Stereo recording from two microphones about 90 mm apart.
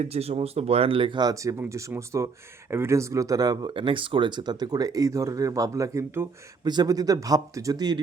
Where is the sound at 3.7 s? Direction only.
70° right (ahead or behind); by 6.0 s 40° right (ahead or behind).